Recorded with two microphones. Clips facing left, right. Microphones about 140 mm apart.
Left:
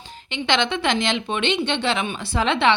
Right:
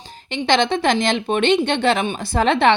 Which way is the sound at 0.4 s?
40° right (ahead or behind).